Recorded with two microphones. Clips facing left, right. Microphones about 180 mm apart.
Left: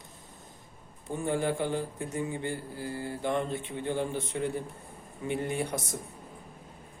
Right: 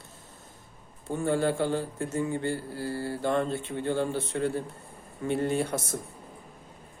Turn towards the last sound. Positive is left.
turn(degrees=15)  # may be behind; listen again after turning